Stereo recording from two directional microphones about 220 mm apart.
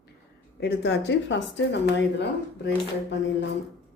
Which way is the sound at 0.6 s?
50° left (ahead or behind).